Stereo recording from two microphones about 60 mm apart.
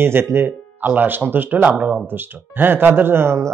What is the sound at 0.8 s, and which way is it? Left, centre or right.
A man's voice, right.